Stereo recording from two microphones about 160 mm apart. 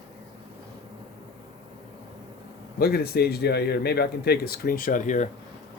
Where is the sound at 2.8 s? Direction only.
75° left (ahead or behind); by 5.3 s 50° left (ahead or behind).